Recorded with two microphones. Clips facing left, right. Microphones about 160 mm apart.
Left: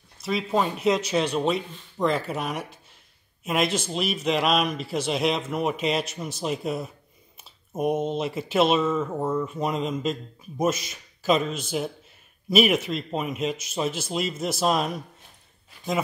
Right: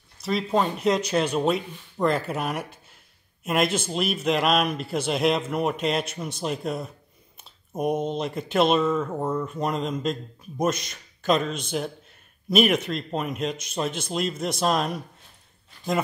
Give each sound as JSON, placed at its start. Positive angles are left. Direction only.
{"t": 0.2, "sound": "a man's voice", "side_deg": 0}